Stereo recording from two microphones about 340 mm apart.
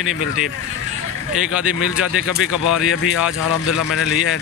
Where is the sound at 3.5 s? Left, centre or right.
Left.